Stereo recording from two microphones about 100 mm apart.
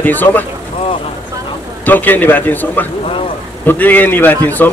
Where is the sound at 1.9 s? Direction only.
20° left (ahead or behind).